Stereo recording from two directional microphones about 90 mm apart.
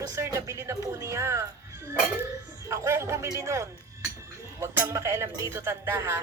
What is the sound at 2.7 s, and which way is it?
Speech, 30° right (ahead or behind).